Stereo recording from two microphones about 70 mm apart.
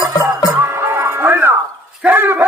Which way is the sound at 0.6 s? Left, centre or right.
Right.